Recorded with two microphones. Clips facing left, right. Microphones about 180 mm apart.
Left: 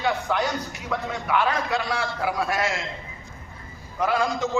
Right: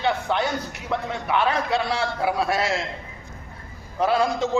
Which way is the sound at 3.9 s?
30° right (ahead or behind).